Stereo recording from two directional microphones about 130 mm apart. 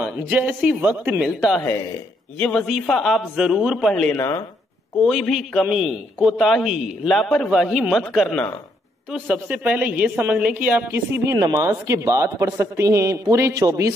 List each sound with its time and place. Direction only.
0.0 s speech: 10° right (ahead or behind)
2.3 s a man's voice: 5° left (ahead or behind)
4.2 s speech: 25° left (ahead or behind)
5.0 s a man's voice: centre (ahead or behind); by 13.9 s 25° right (ahead or behind)